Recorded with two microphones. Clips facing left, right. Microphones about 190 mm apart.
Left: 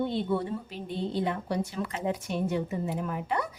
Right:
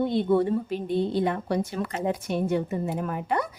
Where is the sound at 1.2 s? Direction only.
55° right (ahead or behind).